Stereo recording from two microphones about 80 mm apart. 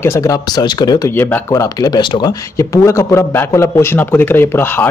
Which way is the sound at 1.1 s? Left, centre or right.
Left.